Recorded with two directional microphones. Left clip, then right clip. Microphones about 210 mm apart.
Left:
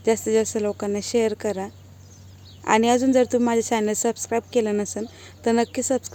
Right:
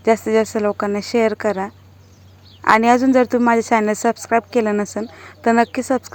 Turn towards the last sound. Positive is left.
turn(degrees=-5)  # may be behind; listen again after turning